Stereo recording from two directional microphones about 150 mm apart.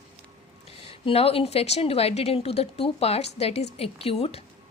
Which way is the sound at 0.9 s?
40° left (ahead or behind).